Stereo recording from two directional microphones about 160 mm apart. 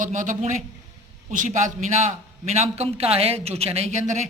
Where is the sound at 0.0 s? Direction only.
55° right (ahead or behind).